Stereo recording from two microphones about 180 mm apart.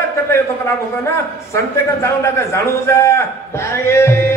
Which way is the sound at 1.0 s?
15° left (ahead or behind).